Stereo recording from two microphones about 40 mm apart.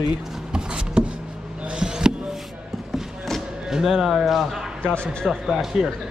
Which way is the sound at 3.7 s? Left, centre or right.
Centre.